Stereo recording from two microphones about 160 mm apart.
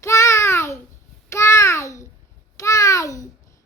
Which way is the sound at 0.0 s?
20° left (ahead or behind).